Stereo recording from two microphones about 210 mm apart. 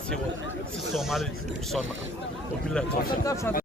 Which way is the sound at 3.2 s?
15° left (ahead or behind).